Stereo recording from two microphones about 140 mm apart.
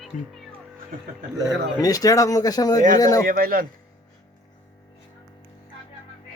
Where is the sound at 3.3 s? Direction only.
90° right.